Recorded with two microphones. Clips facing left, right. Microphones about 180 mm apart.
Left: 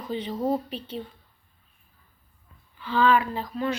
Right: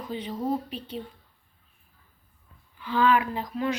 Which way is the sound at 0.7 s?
30° left (ahead or behind).